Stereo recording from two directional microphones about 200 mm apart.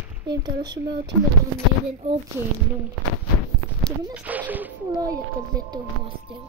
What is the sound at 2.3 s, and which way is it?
Speech, 10° right (ahead or behind).